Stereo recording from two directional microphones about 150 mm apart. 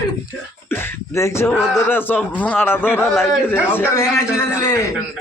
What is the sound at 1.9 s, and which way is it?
Speech, 15° left (ahead or behind).